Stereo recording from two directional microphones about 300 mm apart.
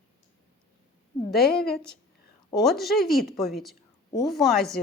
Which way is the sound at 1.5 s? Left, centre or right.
Left.